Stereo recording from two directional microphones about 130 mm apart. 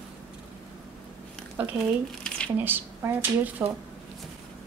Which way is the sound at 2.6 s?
15° right (ahead or behind).